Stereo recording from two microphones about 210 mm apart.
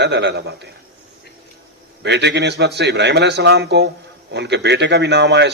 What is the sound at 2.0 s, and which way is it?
A man's voice, 55° right (ahead or behind).